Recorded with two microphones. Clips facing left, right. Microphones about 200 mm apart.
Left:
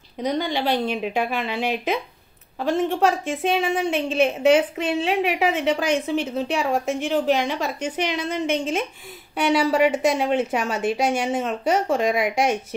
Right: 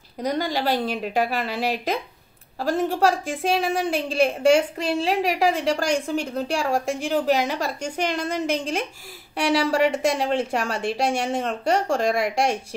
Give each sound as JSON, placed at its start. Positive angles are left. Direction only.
{"t": 0.3, "sound": "a woman's voice", "side_deg": 0}
{"t": 2.6, "sound": "a woman's voice", "side_deg": 0}